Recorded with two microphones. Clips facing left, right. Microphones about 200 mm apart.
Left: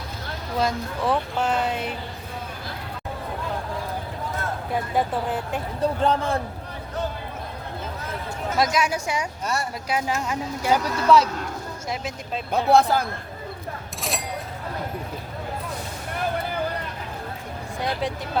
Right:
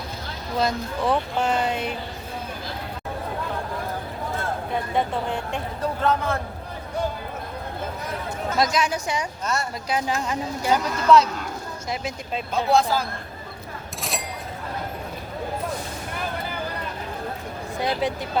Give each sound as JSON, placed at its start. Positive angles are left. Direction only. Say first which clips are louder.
{"t": 0.6, "sound": "speech", "louder": "right 1 dB", "side_deg": 5}
{"t": 4.7, "sound": "speech", "louder": "left 1 dB", "side_deg": 5}
{"t": 6.0, "sound": "a man's voice", "louder": "right 1 dB", "side_deg": 30}
{"t": 8.5, "sound": "speech", "louder": "even", "side_deg": 5}
{"t": 12.5, "sound": "speech", "louder": "left 2 dB", "side_deg": 60}
{"t": 14.0, "sound": "a sound", "louder": "left 1 dB", "side_deg": 0}
{"t": 17.7, "sound": "speech", "louder": "right 2 dB", "side_deg": 0}